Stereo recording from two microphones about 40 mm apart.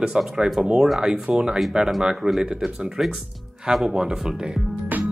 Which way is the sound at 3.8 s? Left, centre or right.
Centre.